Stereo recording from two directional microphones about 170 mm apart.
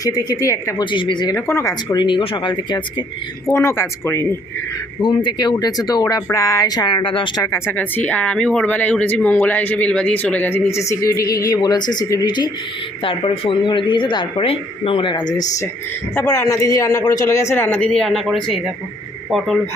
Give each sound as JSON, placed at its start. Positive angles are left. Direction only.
{"t": 0.0, "sound": "speech", "side_deg": 20}
{"t": 0.9, "sound": "speech", "side_deg": 30}
{"t": 3.4, "sound": "speech", "side_deg": 15}
{"t": 4.9, "sound": "speech", "side_deg": 25}
{"t": 7.4, "sound": "a woman's voice", "side_deg": 15}